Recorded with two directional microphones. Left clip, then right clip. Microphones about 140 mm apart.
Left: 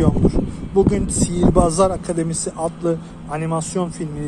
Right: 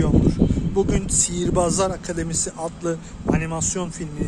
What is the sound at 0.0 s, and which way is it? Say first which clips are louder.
Speech: left 2 dB; 5° right (ahead or behind).